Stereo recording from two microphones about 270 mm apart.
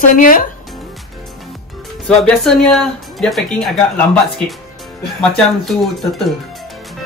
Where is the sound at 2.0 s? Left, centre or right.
Centre.